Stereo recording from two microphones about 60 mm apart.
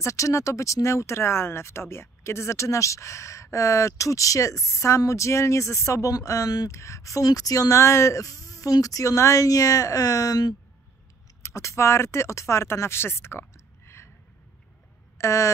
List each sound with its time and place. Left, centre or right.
0.0 s speech: left
7.7 s speech: left
11.4 s speech: left
15.1 s a sound: left